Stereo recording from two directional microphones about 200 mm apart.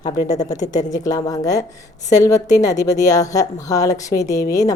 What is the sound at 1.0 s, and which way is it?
A woman's voice, 15° left (ahead or behind).